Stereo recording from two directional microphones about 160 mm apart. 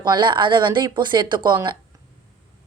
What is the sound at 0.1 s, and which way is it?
A woman's voice, 30° right (ahead or behind).